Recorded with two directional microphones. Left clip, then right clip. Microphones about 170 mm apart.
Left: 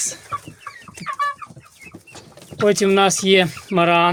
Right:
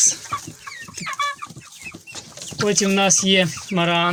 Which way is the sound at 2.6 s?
20° left (ahead or behind).